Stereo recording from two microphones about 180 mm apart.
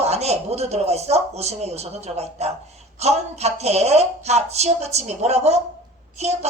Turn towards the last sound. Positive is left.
turn(degrees=-35)  # may be behind; listen again after turning